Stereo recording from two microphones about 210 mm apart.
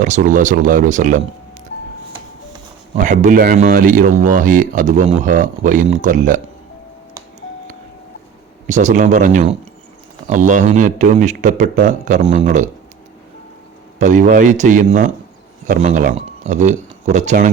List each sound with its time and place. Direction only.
0.0 s speech: 35° right (ahead or behind)
3.0 s speech: 35° right (ahead or behind)
8.6 s speech: 35° right (ahead or behind)
14.0 s speech: 35° right (ahead or behind)